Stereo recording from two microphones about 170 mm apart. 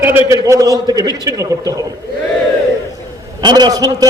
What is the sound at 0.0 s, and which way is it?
A man's voice, 10° right (ahead or behind).